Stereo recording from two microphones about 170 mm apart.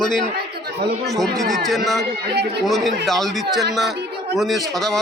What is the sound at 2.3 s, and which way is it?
Speech, 75° right (ahead or behind).